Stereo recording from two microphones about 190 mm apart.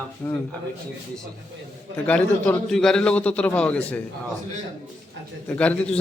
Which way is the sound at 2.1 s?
5° left (ahead or behind).